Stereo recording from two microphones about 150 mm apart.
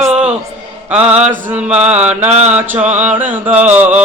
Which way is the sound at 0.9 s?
10° right (ahead or behind).